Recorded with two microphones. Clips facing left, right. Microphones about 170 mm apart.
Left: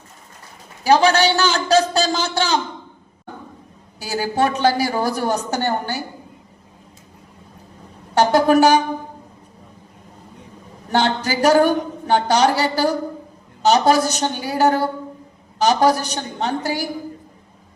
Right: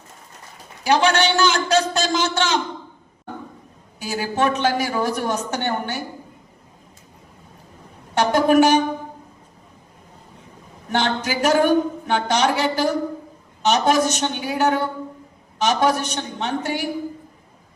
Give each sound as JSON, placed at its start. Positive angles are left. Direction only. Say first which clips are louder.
{"t": 0.9, "sound": "a woman's voice", "louder": "left 3 dB", "side_deg": 35}
{"t": 4.0, "sound": "a woman's voice", "louder": "left 2 dB", "side_deg": 35}
{"t": 8.1, "sound": "a woman's voice", "louder": "left 2 dB", "side_deg": 35}
{"t": 10.9, "sound": "a woman's voice", "louder": "left 3 dB", "side_deg": 35}